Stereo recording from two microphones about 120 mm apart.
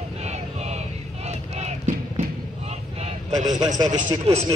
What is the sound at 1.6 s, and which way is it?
Music, 70° right (ahead or behind).